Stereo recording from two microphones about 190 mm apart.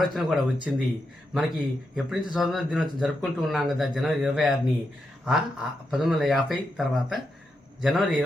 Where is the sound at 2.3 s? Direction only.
Centre (ahead or behind).